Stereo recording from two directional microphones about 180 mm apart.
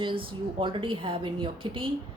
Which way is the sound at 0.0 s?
30° right (ahead or behind).